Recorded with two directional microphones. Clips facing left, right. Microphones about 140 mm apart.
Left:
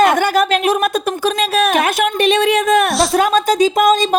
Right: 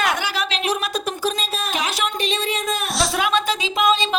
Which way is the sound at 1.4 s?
65° left (ahead or behind).